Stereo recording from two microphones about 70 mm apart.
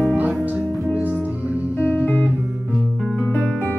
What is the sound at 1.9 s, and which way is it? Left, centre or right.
Music, left.